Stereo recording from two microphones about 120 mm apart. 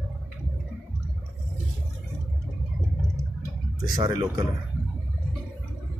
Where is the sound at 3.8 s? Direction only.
30° right (ahead or behind).